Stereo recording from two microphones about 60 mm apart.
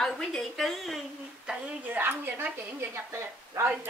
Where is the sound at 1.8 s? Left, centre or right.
Right.